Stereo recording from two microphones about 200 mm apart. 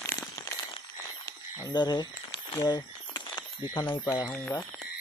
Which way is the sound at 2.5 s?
20° left (ahead or behind).